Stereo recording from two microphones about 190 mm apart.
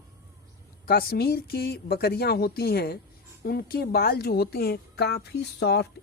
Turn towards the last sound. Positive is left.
turn(degrees=60)  # may be behind; listen again after turning